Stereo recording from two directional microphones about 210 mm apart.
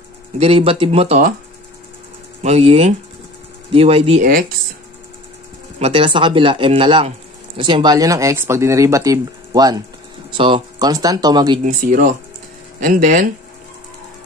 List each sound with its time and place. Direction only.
0.4 s speech: 25° right (ahead or behind)
2.4 s speech: 30° right (ahead or behind)
4.2 s speech: 45° right (ahead or behind)
5.8 s speech: 25° right (ahead or behind)
11.6 s speech: 40° right (ahead or behind)